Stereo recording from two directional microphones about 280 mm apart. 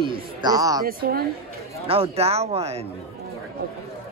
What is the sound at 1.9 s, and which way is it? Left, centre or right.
Speech, right.